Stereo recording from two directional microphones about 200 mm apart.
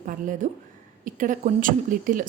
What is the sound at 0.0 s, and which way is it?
A woman's voice, 40° right (ahead or behind).